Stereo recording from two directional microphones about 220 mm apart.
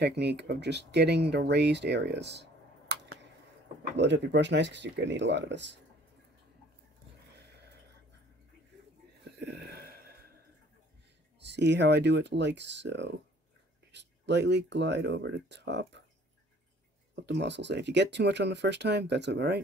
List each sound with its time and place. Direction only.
0.0 s speech: 50° right (ahead or behind)
3.9 s speech: 50° right (ahead or behind)
7.3 s a sound: 50° right (ahead or behind)
9.5 s gasp: 45° right (ahead or behind)
11.4 s speech: 50° right (ahead or behind)
17.1 s speech: 55° right (ahead or behind)